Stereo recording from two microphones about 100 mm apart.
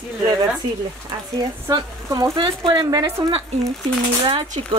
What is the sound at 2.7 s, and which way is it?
Speech, 45° right (ahead or behind).